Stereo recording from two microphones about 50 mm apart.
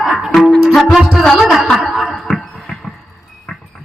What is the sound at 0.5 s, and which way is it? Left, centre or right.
Music, centre.